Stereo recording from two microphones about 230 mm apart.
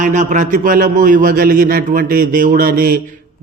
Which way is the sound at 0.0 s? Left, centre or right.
Right.